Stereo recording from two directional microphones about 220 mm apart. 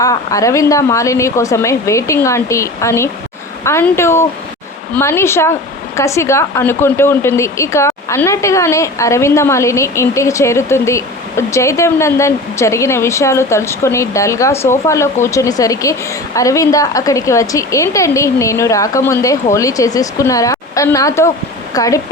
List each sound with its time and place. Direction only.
0.0 s speech: 15° left (ahead or behind)